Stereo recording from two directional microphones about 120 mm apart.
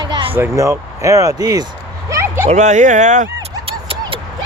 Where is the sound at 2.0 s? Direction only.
25° right (ahead or behind).